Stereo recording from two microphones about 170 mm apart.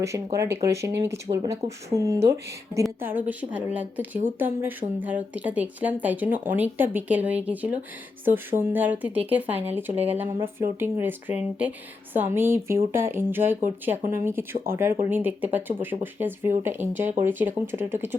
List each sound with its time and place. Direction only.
0.0 s speech: 20° right (ahead or behind)